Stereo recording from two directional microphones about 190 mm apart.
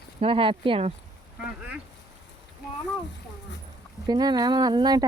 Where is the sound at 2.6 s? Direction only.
55° left (ahead or behind).